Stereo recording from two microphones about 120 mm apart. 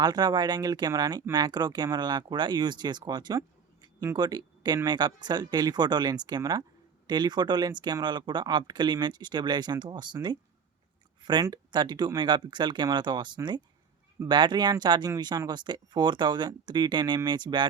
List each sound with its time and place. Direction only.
0.0 s speech: 35° right (ahead or behind)